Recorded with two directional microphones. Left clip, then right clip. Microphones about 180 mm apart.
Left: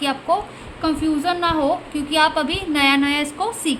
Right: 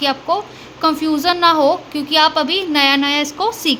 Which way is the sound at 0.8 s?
40° right (ahead or behind).